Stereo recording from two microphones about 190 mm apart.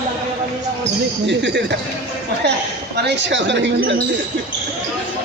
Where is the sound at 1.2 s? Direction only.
65° right (ahead or behind).